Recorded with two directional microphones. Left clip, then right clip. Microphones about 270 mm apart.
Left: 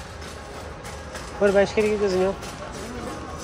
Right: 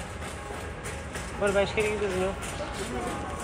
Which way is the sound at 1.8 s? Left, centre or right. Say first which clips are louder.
Left 5 dB; left.